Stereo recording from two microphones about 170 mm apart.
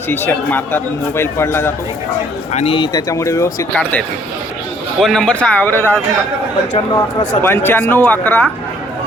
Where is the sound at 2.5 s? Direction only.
40° left (ahead or behind); by 4.0 s 15° left (ahead or behind).